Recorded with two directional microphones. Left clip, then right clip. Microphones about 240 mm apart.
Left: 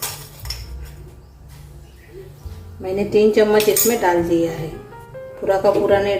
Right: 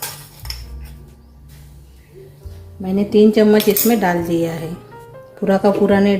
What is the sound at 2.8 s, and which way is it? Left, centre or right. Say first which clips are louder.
Speech: right 2 dB; right.